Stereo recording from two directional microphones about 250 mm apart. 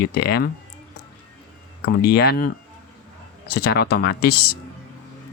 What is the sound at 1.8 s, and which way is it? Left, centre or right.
Speech, left.